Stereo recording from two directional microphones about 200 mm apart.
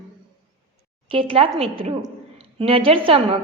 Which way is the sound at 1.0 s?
30° right (ahead or behind).